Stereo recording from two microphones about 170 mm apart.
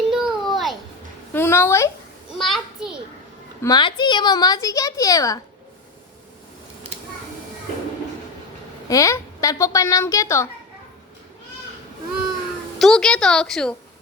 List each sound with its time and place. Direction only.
0.1 s a sound: centre (ahead or behind)
1.3 s a child's voice: 15° left (ahead or behind)
2.4 s a child's voice: centre (ahead or behind)
3.6 s a woman's voice: 25° left (ahead or behind)
8.9 s a woman's voice: 20° left (ahead or behind)
12.8 s a woman's voice: 5° left (ahead or behind)